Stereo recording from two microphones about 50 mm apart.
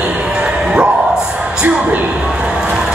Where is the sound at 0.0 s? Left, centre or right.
Right.